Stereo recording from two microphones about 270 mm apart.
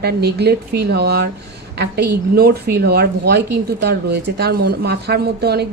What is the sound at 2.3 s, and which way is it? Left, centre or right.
A woman's voice, right.